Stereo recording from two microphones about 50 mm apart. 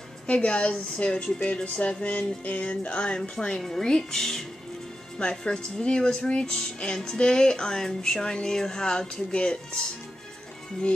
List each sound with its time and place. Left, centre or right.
0.3 s a woman's voice: left